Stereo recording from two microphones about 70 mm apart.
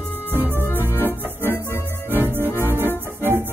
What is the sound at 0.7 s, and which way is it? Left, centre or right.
Organ, left.